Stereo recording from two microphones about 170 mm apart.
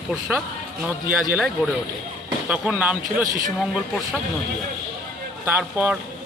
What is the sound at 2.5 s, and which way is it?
Speech, 10° right (ahead or behind).